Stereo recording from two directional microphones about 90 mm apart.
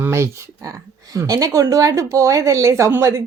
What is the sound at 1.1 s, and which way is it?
A woman's voice, 40° right (ahead or behind).